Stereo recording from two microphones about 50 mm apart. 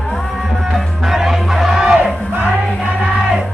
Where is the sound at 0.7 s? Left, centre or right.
Centre.